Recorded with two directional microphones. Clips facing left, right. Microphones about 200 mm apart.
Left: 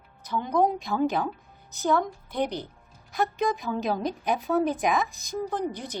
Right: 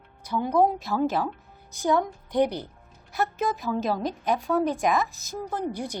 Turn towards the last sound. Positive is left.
turn(degrees=-10)  # may be behind; listen again after turning